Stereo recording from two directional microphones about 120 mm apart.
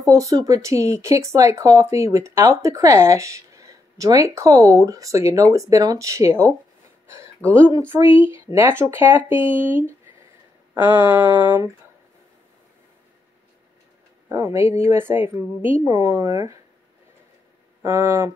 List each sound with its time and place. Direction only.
0.0 s speech: 30° right (ahead or behind)
10.7 s a sound: 15° right (ahead or behind)
14.3 s speech: 25° right (ahead or behind)
17.8 s speech: 20° right (ahead or behind)